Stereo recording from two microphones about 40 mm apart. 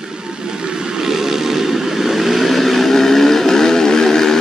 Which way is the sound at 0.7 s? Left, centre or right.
Right.